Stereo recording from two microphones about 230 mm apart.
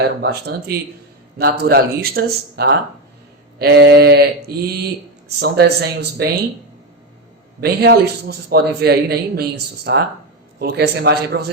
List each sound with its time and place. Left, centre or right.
0.0 s a man's voice: right
7.6 s a man's voice: right